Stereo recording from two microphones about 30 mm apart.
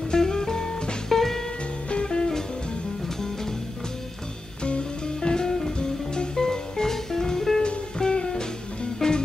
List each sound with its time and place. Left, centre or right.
0.1 s music: left
1.9 s music: left
4.6 s music: left; by 7.6 s centre
7.6 s music: left
9.0 s music: centre